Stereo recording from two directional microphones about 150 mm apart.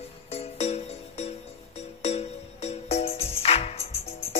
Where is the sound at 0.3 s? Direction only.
45° left (ahead or behind).